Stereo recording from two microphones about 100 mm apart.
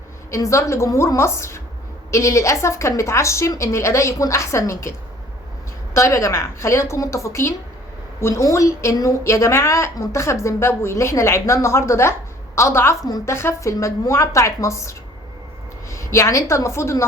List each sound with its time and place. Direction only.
0.3 s a woman's voice: 30° left (ahead or behind)